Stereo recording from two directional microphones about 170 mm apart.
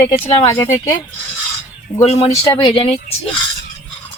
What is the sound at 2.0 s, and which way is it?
Speech, 40° left (ahead or behind).